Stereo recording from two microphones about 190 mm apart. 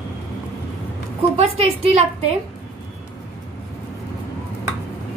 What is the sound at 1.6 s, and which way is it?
Speech, 30° right (ahead or behind).